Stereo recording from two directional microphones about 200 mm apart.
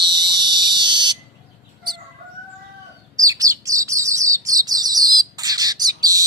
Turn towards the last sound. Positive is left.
turn(degrees=-20)  # may be behind; listen again after turning